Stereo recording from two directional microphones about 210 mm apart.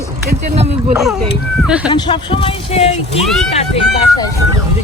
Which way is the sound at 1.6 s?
5° right (ahead or behind).